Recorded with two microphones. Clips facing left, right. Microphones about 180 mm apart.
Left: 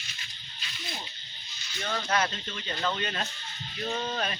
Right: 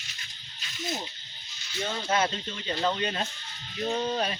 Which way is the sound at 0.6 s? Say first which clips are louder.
Right 7 dB; 45° right (ahead or behind).